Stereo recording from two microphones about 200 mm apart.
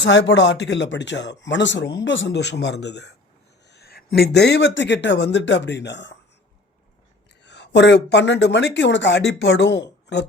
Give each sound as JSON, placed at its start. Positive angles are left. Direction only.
{"t": 0.0, "sound": "speech", "side_deg": 65}
{"t": 7.4, "sound": "speech", "side_deg": 60}